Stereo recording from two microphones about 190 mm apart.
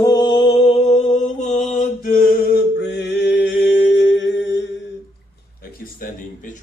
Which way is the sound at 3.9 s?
70° left (ahead or behind).